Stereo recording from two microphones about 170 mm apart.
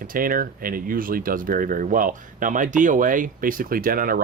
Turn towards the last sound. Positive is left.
turn(degrees=-60)  # may be behind; listen again after turning